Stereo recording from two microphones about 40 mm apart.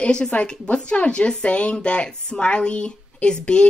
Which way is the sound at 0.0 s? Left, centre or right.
Left.